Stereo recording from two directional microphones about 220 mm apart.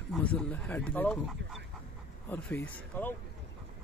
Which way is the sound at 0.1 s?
5° left (ahead or behind).